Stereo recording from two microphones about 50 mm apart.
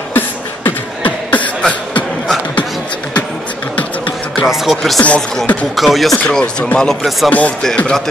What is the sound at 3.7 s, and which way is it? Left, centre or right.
Beatboxing, left.